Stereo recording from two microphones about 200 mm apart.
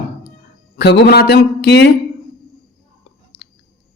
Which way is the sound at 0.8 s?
55° left (ahead or behind).